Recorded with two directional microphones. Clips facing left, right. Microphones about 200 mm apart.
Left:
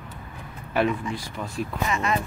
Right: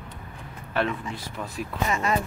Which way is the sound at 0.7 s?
10° left (ahead or behind).